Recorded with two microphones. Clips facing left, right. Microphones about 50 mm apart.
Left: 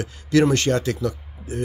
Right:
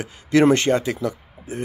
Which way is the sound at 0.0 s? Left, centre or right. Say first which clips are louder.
Right 2 dB; right.